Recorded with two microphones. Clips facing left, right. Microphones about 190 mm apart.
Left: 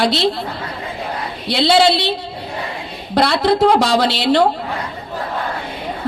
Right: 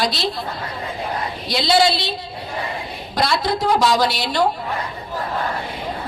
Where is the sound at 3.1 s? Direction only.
65° left (ahead or behind).